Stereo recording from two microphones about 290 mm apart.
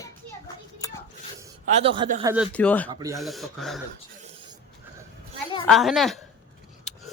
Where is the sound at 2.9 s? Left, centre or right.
Centre.